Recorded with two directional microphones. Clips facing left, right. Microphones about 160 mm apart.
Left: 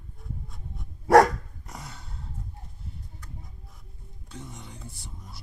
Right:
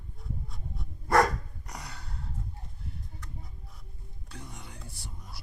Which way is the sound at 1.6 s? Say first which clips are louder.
Left 1 dB; centre (ahead or behind).